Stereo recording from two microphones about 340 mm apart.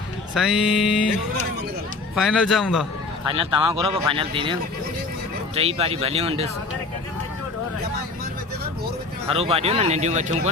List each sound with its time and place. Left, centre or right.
0.3 s speech: centre
2.1 s speech: centre
3.2 s speech: centre
5.5 s speech: centre
9.3 s speech: centre